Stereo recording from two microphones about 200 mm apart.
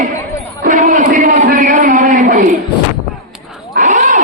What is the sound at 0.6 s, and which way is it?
A man's voice, 40° right (ahead or behind).